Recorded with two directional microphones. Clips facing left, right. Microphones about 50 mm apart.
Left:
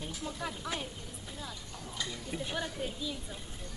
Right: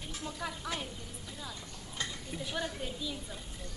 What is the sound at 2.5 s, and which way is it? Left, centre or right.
Speech, centre.